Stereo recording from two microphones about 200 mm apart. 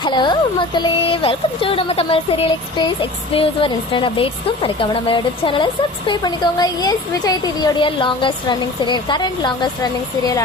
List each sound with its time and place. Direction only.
0.0 s speech: 20° left (ahead or behind)